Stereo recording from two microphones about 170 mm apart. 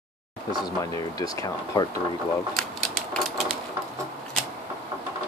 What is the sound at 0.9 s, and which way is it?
Speech, 20° left (ahead or behind).